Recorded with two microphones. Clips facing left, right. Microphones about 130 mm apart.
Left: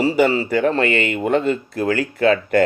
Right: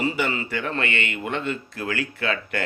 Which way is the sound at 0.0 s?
35° left (ahead or behind).